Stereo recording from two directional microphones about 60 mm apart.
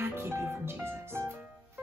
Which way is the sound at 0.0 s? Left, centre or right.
Right.